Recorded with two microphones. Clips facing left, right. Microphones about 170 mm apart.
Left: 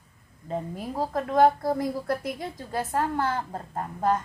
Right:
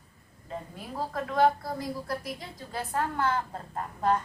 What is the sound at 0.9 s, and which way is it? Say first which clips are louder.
A woman's voice: left 5 dB; 45° left (ahead or behind).